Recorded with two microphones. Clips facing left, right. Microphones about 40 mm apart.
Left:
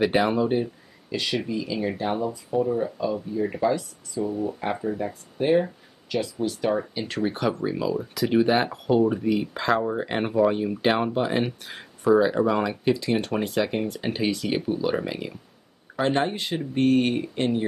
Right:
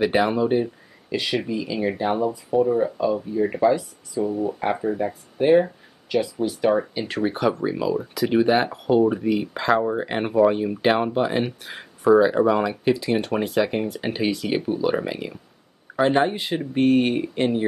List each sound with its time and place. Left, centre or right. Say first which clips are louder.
0.0 s speech: right 2 dB; centre
3.6 s speech: right 4 dB; centre